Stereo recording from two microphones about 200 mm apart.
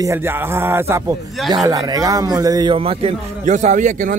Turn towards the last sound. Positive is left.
turn(degrees=-40)  # may be behind; listen again after turning